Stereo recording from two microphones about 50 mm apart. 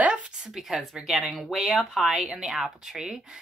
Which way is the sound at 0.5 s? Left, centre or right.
Centre.